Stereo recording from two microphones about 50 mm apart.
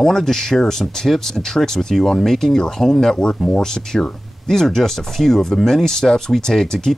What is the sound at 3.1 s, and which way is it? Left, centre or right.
Speech, centre.